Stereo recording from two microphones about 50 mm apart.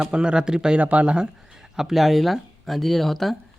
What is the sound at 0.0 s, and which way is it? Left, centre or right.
Speech, centre.